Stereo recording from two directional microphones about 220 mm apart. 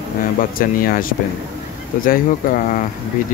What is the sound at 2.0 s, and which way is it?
Speech, 40° left (ahead or behind).